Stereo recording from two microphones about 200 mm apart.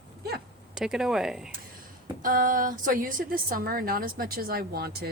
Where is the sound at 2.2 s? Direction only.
45° right (ahead or behind).